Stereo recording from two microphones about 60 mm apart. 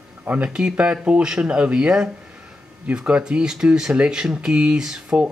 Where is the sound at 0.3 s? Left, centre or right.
Right.